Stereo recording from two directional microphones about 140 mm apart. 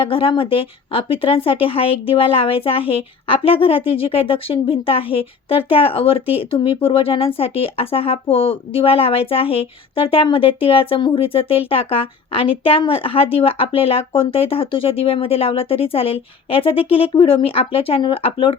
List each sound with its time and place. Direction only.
0.0 s speech: 40° left (ahead or behind)